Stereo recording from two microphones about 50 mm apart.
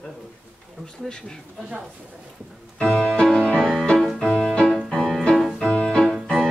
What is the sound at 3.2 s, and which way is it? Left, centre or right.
Music, centre.